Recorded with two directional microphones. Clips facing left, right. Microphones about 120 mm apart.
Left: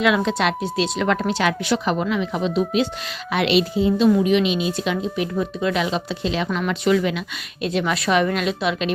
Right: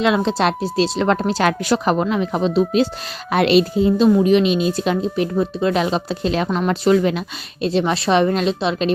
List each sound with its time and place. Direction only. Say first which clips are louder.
0.0 s speech: right 2 dB; 30° right (ahead or behind)